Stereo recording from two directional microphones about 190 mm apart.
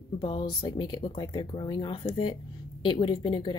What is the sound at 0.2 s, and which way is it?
Speech, 25° left (ahead or behind).